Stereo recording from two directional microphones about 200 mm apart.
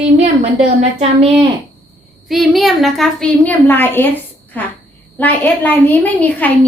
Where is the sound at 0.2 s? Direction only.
35° right (ahead or behind).